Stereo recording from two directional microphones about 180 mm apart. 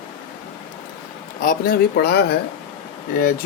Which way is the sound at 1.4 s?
50° left (ahead or behind).